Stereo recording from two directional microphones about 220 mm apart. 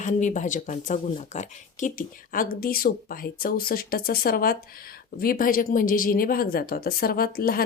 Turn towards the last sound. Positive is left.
turn(degrees=45)  # may be behind; listen again after turning